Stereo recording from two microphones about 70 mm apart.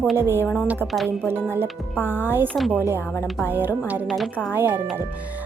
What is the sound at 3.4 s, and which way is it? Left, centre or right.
Speech, right.